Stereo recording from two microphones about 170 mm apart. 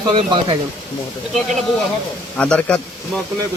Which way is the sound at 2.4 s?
5° left (ahead or behind).